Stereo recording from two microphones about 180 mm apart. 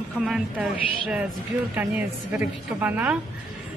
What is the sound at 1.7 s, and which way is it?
A woman's voice, 10° right (ahead or behind).